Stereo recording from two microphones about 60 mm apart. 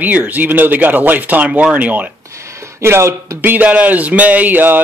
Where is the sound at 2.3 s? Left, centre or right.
Right.